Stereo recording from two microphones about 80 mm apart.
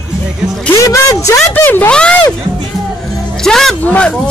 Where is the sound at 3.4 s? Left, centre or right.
Centre.